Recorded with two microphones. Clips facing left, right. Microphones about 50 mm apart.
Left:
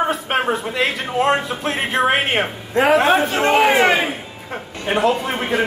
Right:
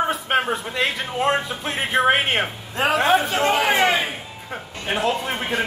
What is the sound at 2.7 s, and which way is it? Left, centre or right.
Speech, left.